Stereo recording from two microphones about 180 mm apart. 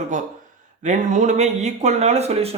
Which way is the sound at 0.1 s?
45° right (ahead or behind).